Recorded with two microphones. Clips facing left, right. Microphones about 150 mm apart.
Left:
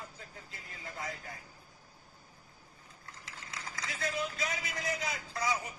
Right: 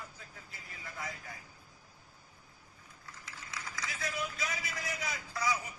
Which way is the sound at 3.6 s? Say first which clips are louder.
Left 1 dB; 30° left (ahead or behind).